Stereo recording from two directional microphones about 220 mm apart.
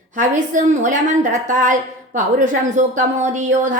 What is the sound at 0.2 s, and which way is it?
A woman's voice, 35° right (ahead or behind).